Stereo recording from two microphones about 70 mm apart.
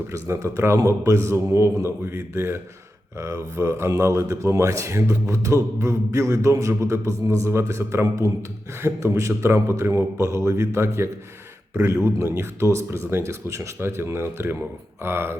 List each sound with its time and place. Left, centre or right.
0.1 s speech: right